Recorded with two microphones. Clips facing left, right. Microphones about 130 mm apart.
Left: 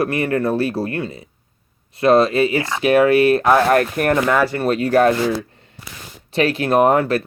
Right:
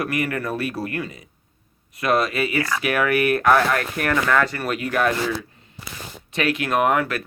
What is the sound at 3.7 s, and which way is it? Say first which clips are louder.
Speech: left 7 dB; 40° left (ahead or behind).